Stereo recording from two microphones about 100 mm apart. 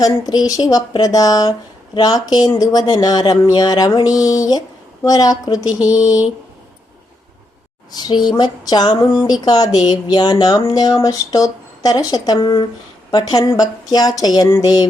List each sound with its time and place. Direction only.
0.0 s speech: 40° left (ahead or behind)
7.9 s a sound: 45° left (ahead or behind)
9.4 s speech: 40° left (ahead or behind)